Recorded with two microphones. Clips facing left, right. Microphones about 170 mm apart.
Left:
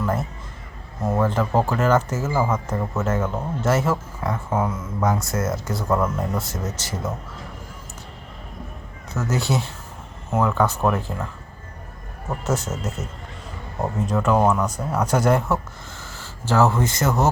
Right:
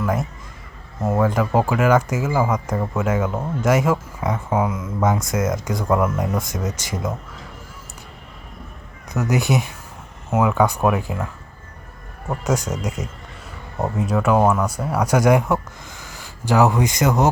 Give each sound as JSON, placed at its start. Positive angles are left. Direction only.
{"t": 0.0, "sound": "a man's voice", "side_deg": -10}
{"t": 9.1, "sound": "speech", "side_deg": -15}
{"t": 10.9, "sound": "speech", "side_deg": -5}
{"t": 12.5, "sound": "speech", "side_deg": -15}